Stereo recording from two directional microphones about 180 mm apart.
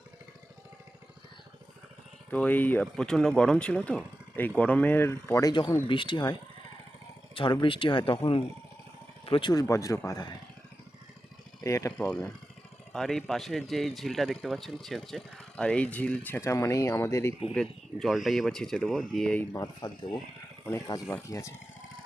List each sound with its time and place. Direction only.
2.3 s speech: 10° left (ahead or behind); by 6.3 s 25° left (ahead or behind)
7.3 s speech: 25° left (ahead or behind)
11.6 s speech: 15° left (ahead or behind)
11.9 s a man's voice: 5° left (ahead or behind)
17.5 s a man's voice: centre (ahead or behind)
19.5 s speech: 20° left (ahead or behind)